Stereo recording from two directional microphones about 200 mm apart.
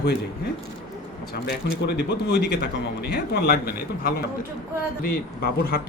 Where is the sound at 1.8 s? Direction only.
55° left (ahead or behind).